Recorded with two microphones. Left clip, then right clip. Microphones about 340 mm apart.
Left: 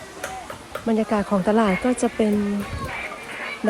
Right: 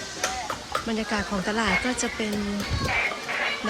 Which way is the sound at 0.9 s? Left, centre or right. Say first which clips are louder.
Left 10 dB; centre.